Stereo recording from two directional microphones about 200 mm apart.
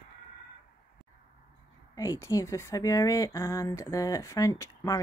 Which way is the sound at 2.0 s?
15° left (ahead or behind).